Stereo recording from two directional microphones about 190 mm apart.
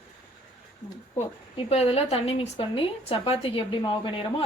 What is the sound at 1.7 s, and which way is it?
A woman's voice, 30° left (ahead or behind).